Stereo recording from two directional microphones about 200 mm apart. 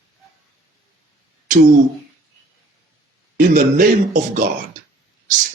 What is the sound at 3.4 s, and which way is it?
Speech, 45° right (ahead or behind).